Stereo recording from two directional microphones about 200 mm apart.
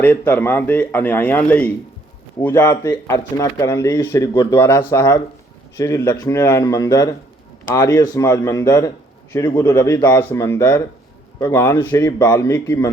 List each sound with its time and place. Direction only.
0.0 s speech: 10° left (ahead or behind)